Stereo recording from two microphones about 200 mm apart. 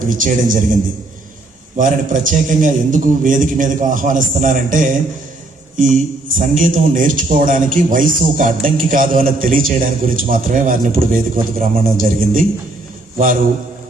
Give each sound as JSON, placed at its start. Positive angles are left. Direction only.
{"t": 0.1, "sound": "a man's voice", "side_deg": -40}